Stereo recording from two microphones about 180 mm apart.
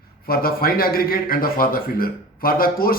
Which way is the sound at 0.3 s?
55° left (ahead or behind).